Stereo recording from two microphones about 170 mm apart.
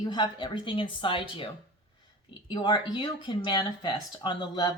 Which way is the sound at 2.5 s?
25° left (ahead or behind).